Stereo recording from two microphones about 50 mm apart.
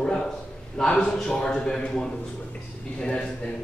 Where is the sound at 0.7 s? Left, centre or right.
Centre.